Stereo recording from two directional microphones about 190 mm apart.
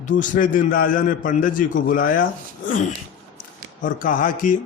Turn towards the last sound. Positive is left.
turn(degrees=45)  # may be behind; listen again after turning